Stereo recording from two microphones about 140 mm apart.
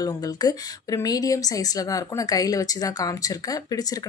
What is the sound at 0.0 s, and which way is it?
A woman's voice, 25° left (ahead or behind).